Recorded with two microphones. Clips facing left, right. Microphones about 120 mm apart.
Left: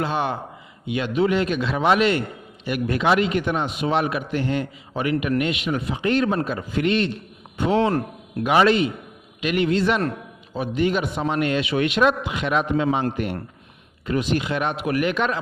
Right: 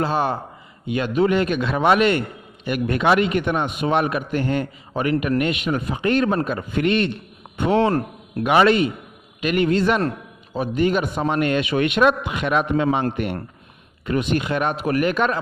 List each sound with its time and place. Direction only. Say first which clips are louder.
0.0 s a man's voice: right 3 dB; 40° right (ahead or behind)